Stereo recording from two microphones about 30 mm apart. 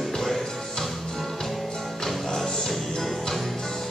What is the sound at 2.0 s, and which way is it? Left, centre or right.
Music, centre.